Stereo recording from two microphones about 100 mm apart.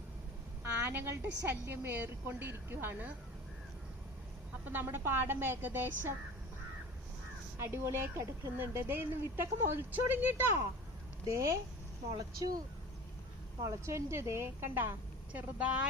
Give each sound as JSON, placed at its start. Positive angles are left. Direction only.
{"t": 0.9, "sound": "speech", "side_deg": -20}
{"t": 4.6, "sound": "speech", "side_deg": -20}
{"t": 7.6, "sound": "speech", "side_deg": -25}
{"t": 11.3, "sound": "speech", "side_deg": -30}
{"t": 13.6, "sound": "speech", "side_deg": -30}